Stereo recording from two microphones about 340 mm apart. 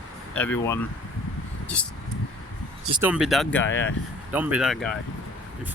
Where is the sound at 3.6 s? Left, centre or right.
Left.